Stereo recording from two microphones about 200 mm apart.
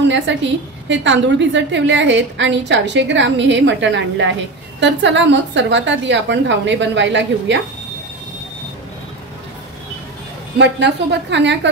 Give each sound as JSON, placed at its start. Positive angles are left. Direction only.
{"t": 0.3, "sound": "a woman's voice", "side_deg": -65}
{"t": 10.6, "sound": "a woman's voice", "side_deg": -60}